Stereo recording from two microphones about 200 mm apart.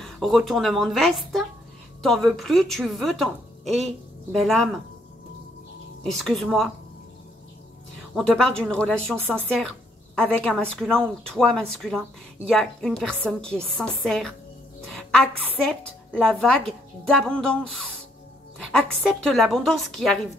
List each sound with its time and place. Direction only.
0.0 s a woman's voice: centre (ahead or behind)
6.0 s a woman's voice: centre (ahead or behind)
8.1 s a woman's voice: 5° left (ahead or behind)
18.7 s a woman's voice: 5° left (ahead or behind)